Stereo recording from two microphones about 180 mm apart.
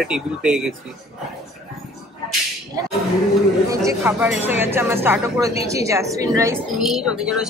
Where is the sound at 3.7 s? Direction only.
20° right (ahead or behind).